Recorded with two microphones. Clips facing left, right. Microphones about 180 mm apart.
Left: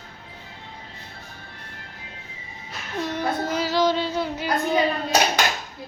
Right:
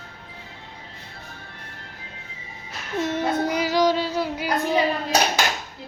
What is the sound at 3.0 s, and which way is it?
Child singing, 20° right (ahead or behind).